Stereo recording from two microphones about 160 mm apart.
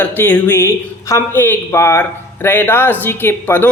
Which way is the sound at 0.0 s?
10° left (ahead or behind).